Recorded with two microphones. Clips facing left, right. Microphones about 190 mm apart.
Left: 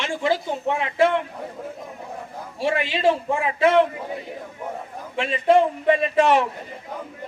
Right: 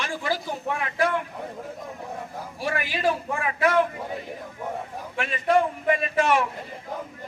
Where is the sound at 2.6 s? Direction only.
25° left (ahead or behind).